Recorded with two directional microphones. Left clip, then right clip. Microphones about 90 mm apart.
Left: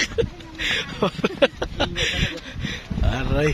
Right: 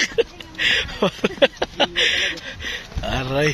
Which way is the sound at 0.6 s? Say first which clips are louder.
Right 4 dB; centre (ahead or behind).